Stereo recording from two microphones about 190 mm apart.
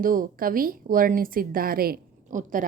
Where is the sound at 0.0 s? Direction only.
45° right (ahead or behind).